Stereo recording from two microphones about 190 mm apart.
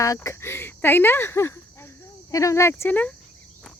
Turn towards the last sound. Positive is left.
turn(degrees=10)  # may be behind; listen again after turning